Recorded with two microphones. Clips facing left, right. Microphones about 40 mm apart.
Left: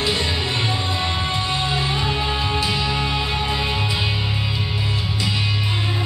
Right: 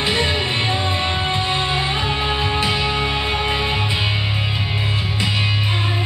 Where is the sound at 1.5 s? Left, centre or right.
Right.